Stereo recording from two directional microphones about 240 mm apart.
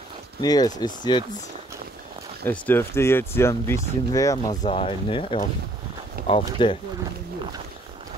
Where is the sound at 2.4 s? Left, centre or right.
Centre.